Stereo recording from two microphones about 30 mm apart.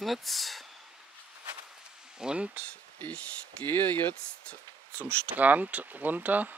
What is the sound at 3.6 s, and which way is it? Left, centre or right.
Speech, left.